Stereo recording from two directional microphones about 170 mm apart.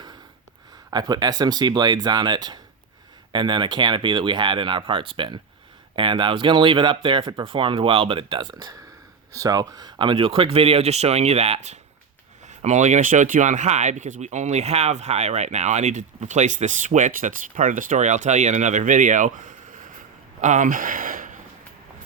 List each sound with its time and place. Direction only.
0.9 s speech: 25° right (ahead or behind); by 21.4 s 50° right (ahead or behind)